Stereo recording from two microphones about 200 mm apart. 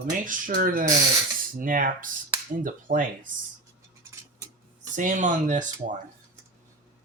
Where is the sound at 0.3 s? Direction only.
40° right (ahead or behind).